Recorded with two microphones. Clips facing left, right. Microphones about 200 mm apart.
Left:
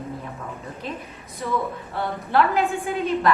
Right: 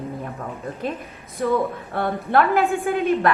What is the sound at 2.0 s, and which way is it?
A woman's voice, 55° right (ahead or behind).